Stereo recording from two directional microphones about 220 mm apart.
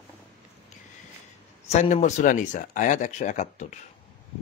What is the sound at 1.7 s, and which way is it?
Speech, 30° left (ahead or behind).